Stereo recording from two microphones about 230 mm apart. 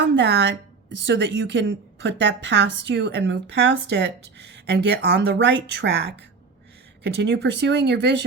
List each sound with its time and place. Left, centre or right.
0.0 s a woman's voice: right